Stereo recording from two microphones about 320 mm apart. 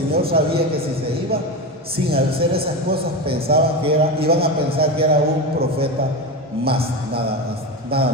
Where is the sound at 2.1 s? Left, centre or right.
Right.